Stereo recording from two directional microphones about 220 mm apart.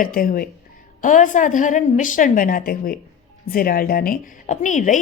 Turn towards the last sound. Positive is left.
turn(degrees=35)  # may be behind; listen again after turning